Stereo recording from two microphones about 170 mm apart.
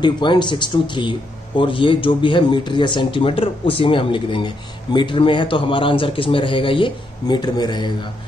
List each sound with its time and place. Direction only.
0.0 s a man's voice: 25° left (ahead or behind)